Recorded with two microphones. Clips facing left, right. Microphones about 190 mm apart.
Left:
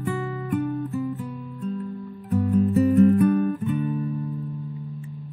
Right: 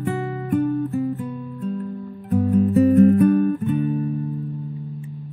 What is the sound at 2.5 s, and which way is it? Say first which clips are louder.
Music: right 3 dB; 55° right (ahead or behind).